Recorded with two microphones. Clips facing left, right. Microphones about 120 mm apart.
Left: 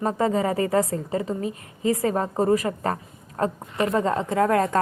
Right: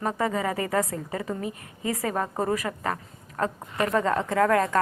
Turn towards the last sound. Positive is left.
turn(degrees=30)  # may be behind; listen again after turning